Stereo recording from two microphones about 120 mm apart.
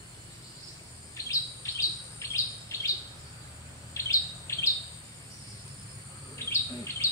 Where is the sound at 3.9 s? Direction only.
25° left (ahead or behind).